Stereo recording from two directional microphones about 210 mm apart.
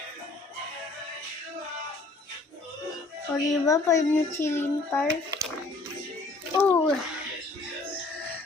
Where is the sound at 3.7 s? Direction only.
15° left (ahead or behind).